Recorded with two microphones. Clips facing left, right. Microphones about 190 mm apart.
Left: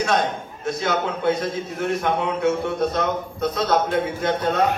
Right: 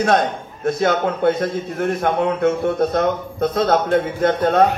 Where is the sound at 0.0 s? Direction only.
55° right (ahead or behind).